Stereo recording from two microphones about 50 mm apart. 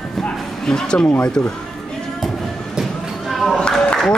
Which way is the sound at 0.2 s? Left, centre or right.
Centre.